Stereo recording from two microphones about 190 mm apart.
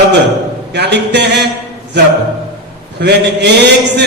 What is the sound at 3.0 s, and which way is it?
A man's voice, 60° right (ahead or behind).